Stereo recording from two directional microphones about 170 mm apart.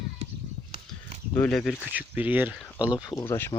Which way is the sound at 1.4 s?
5° left (ahead or behind).